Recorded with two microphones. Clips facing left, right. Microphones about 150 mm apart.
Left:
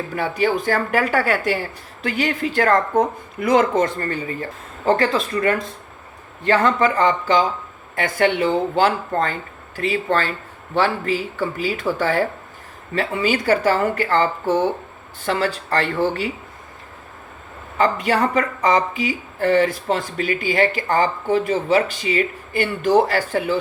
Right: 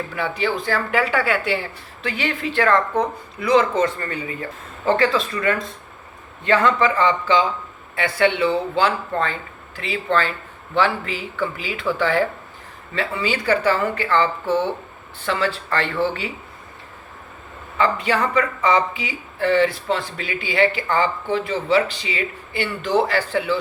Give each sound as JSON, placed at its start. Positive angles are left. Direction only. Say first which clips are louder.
{"t": 0.1, "sound": "speech", "louder": "left 5 dB", "side_deg": 45}
{"t": 17.7, "sound": "speech", "louder": "left 2 dB", "side_deg": 45}